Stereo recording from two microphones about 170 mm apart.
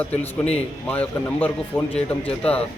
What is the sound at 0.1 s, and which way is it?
A man's voice, 10° left (ahead or behind).